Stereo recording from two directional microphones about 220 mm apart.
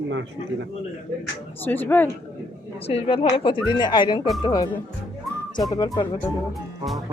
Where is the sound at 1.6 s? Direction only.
10° left (ahead or behind).